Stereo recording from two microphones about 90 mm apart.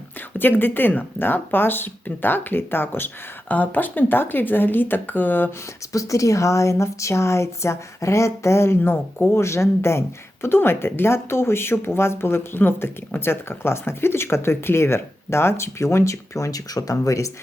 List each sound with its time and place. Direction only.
0.3 s speech: 20° left (ahead or behind)
5.9 s a woman's voice: 35° left (ahead or behind); by 9.3 s 20° left (ahead or behind)
9.3 s speech: 30° left (ahead or behind)